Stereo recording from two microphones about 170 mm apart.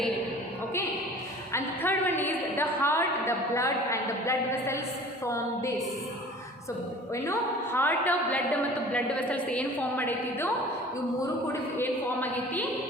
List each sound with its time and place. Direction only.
1.5 s a woman's voice: 10° left (ahead or behind)
7.1 s a woman's voice: 15° left (ahead or behind)
11.8 s a woman's voice: 10° left (ahead or behind)